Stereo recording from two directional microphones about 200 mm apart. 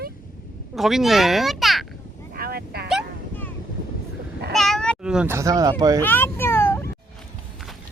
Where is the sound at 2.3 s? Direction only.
50° right (ahead or behind).